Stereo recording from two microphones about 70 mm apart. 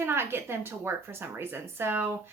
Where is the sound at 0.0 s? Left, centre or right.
Right.